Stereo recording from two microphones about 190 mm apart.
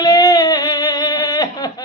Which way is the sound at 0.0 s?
20° left (ahead or behind).